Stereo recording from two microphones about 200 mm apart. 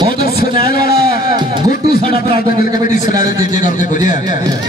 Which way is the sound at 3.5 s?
40° left (ahead or behind).